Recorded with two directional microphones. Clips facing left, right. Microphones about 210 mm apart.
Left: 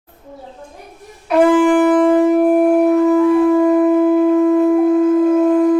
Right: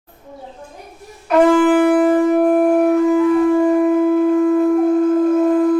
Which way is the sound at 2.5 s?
5° left (ahead or behind).